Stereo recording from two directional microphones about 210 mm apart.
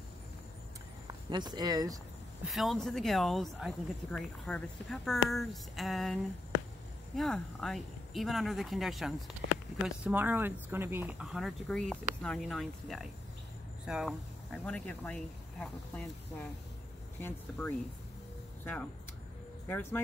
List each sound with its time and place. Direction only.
1.0 s speech: 20° right (ahead or behind)
2.5 s speech: centre (ahead or behind)
7.2 s speech: centre (ahead or behind)
19.7 s speech: 10° left (ahead or behind)